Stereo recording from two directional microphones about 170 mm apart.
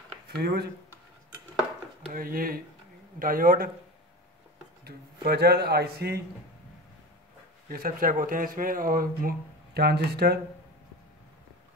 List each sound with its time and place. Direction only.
0.3 s a man's voice: 70° right (ahead or behind)
2.1 s speech: 60° right (ahead or behind)
4.8 s a man's voice: 70° right (ahead or behind)
7.7 s speech: 55° right (ahead or behind)
9.8 s a man's voice: 70° right (ahead or behind)